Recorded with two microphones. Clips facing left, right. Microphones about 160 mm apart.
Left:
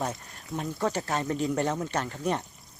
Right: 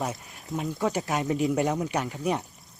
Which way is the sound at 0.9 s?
15° right (ahead or behind).